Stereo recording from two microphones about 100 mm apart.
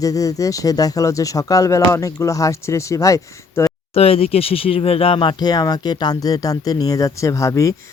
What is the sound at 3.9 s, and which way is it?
Speech, 85° left.